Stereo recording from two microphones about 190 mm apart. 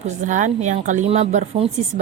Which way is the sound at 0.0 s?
40° right (ahead or behind).